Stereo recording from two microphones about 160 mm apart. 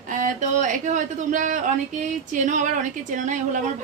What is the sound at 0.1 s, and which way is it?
A woman's voice, 55° right (ahead or behind).